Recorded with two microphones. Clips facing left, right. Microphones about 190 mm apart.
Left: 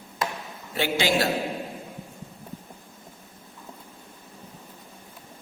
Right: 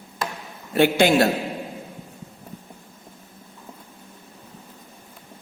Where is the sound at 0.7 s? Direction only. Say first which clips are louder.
Right 7 dB; 55° right (ahead or behind).